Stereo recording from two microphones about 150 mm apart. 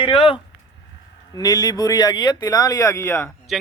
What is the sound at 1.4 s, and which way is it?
Speech, 25° left (ahead or behind).